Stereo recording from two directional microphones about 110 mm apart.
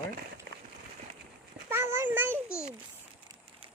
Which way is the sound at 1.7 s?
25° right (ahead or behind).